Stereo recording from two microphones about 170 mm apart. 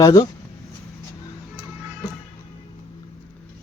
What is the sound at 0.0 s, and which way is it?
Speech, 20° left (ahead or behind).